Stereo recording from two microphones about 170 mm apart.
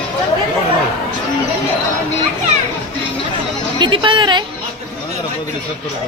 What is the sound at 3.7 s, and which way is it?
Music, 30° right (ahead or behind).